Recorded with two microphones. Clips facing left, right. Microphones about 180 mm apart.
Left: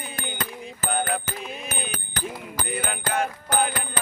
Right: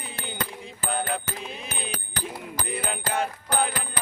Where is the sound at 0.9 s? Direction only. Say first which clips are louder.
Left 2 dB; 30° right (ahead or behind).